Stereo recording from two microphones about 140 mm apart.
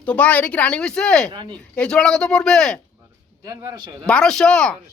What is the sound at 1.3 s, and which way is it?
Speech, 35° right (ahead or behind).